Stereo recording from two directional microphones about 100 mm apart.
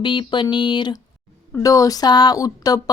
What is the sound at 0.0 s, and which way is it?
Speech, 55° left (ahead or behind).